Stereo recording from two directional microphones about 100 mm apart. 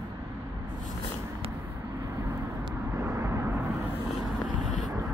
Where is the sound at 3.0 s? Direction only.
25° right (ahead or behind).